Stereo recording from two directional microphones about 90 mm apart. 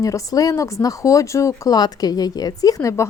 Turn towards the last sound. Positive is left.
turn(degrees=35)  # may be behind; listen again after turning